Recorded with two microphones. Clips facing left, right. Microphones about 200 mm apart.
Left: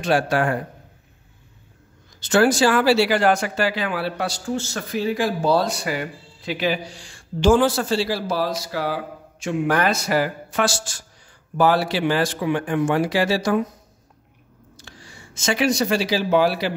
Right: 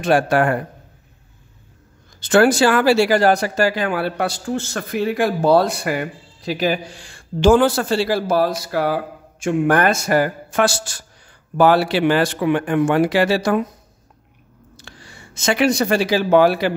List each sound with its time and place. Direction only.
0.0 s speech: 55° right (ahead or behind)
2.1 s speech: 55° right (ahead or behind)
14.8 s speech: 65° right (ahead or behind)